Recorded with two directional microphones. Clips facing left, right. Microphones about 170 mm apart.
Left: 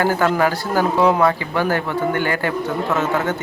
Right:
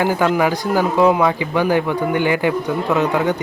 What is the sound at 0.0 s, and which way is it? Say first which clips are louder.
Speech: right 1 dB; 15° right (ahead or behind).